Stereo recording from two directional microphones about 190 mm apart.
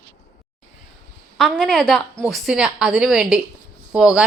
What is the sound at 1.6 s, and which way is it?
Speech, 5° left (ahead or behind).